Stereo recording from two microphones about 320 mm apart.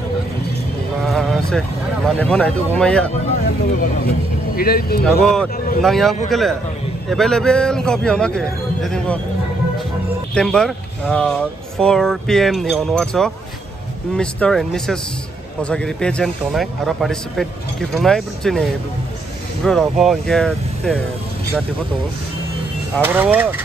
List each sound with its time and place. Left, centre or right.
1.0 s a sound: centre
2.0 s speech: centre
4.6 s speech: left
5.0 s speech: centre
10.3 s speech: centre
23.0 s speech: centre